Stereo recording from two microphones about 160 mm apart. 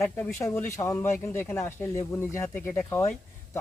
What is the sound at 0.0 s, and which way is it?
Speech, 15° left (ahead or behind).